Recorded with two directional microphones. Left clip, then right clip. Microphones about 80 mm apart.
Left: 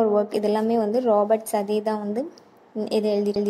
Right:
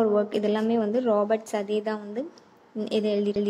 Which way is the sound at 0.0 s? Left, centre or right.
Left.